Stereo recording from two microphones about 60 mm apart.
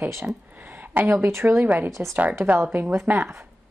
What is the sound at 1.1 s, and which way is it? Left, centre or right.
Speech, right.